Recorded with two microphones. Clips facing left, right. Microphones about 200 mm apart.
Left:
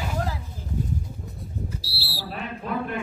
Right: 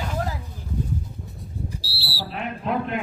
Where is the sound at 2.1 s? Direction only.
45° left (ahead or behind).